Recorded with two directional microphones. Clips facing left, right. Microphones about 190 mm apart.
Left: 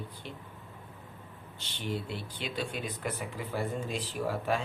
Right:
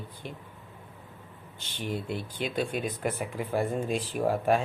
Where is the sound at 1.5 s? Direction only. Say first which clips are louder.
Right 2 dB; 50° right (ahead or behind).